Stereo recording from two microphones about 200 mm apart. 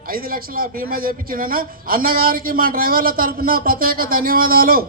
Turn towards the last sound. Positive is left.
turn(degrees=-45)  # may be behind; listen again after turning